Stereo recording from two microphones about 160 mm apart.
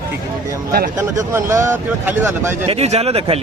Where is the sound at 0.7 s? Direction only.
60° right (ahead or behind).